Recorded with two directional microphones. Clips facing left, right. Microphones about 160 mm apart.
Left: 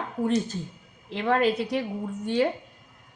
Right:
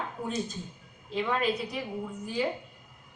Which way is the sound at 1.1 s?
75° left (ahead or behind).